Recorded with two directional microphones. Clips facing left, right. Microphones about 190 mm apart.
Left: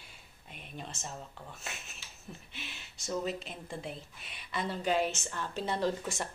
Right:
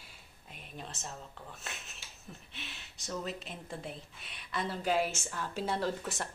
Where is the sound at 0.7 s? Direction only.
Centre (ahead or behind).